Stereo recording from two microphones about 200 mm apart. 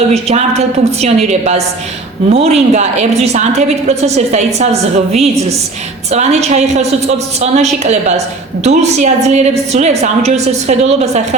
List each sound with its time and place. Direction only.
0.1 s a woman's voice: 30° right (ahead or behind)